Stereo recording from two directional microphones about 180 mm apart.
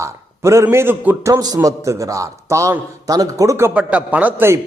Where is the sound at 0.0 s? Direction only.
15° right (ahead or behind).